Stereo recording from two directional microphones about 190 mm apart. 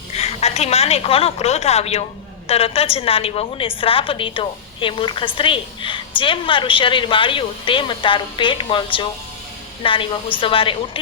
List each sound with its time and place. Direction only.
0.1 s a woman's voice: 35° left (ahead or behind)